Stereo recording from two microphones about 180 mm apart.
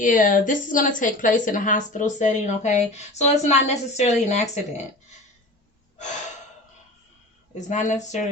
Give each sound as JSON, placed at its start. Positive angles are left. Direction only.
{"t": 0.0, "sound": "a woman's voice", "side_deg": 45}
{"t": 7.5, "sound": "a woman's voice", "side_deg": 45}